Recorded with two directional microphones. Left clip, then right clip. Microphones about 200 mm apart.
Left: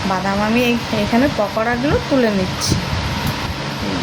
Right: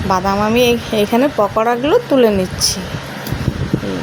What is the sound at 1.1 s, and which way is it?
Speech, 30° right (ahead or behind).